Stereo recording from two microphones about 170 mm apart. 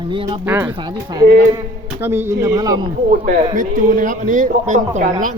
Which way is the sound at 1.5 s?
15° right (ahead or behind).